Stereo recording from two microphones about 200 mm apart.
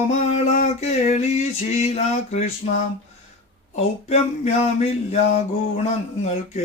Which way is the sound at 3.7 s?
30° left (ahead or behind).